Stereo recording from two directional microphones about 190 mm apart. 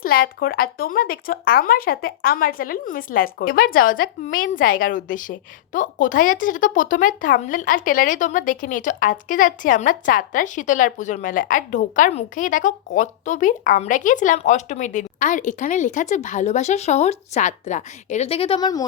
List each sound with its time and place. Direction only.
0.0 s speech: 50° left (ahead or behind); by 18.9 s 20° left (ahead or behind)